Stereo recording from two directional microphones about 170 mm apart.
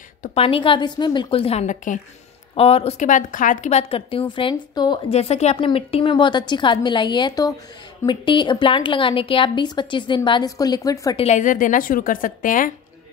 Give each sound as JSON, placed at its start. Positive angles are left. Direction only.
{"t": 0.2, "sound": "a woman's voice", "side_deg": 35}
{"t": 5.1, "sound": "a woman's voice", "side_deg": 40}
{"t": 11.1, "sound": "a woman's voice", "side_deg": 45}